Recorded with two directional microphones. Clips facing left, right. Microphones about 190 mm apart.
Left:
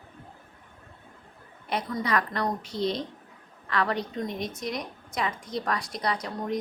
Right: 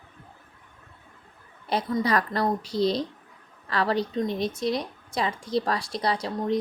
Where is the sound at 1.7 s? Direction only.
30° right (ahead or behind).